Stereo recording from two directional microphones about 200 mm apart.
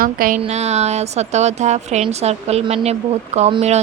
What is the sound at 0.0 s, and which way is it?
Speech, 45° right (ahead or behind).